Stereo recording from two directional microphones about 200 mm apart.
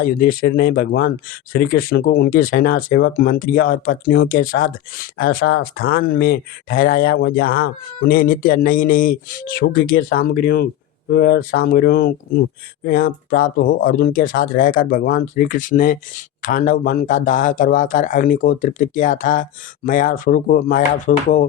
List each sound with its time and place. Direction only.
0.0 s speech: 45° left (ahead or behind)